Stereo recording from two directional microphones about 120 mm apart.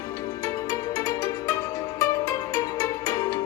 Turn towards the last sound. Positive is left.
turn(degrees=25)  # may be behind; listen again after turning